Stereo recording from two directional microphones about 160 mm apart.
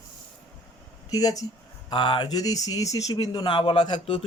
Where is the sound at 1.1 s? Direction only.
20° left (ahead or behind).